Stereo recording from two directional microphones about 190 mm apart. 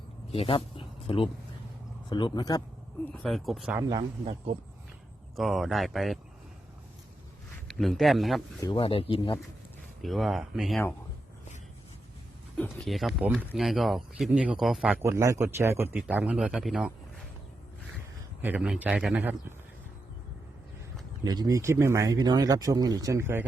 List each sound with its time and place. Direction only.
0.3 s speech: 30° left (ahead or behind)
3.1 s speech: centre (ahead or behind)
3.8 s speech: 20° right (ahead or behind)
5.4 s speech: centre (ahead or behind)
7.7 s speech: centre (ahead or behind)
8.6 s speech: 25° left (ahead or behind)
10.0 s speech: centre (ahead or behind)
12.5 s speech: 5° left (ahead or behind)
18.4 s speech: 5° right (ahead or behind)
21.2 s speech: 20° right (ahead or behind)